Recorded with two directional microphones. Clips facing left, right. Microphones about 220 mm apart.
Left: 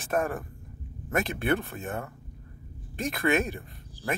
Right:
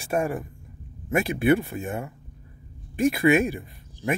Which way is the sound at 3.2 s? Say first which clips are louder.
Right 4 dB; 15° right (ahead or behind).